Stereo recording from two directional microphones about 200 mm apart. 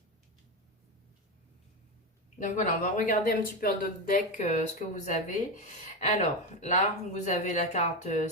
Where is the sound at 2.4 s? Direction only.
40° left (ahead or behind).